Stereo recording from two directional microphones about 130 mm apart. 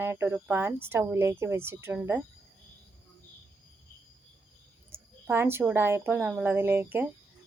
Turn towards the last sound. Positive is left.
turn(degrees=-15)  # may be behind; listen again after turning